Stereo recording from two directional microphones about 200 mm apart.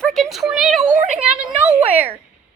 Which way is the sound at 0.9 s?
40° right (ahead or behind).